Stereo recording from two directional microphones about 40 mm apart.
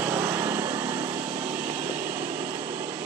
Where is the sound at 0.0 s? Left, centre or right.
Right.